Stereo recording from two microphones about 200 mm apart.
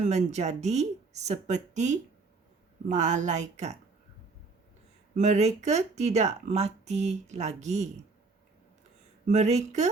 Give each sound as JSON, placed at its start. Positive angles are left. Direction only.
{"t": 0.0, "sound": "speech", "side_deg": -35}
{"t": 5.1, "sound": "speech", "side_deg": -35}
{"t": 9.2, "sound": "speech", "side_deg": -35}